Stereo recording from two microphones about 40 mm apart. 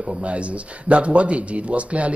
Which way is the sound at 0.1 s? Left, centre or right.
Right.